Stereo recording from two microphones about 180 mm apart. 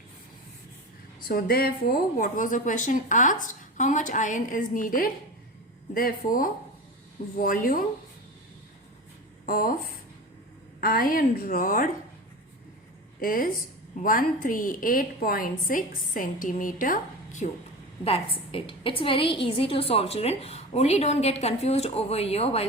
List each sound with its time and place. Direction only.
1.3 s a woman's voice: 55° left (ahead or behind)
9.5 s a woman's voice: 50° left (ahead or behind)
13.2 s a woman's voice: 50° left (ahead or behind); by 22.6 s 35° left (ahead or behind)